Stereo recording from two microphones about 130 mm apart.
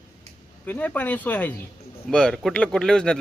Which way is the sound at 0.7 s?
10° left (ahead or behind).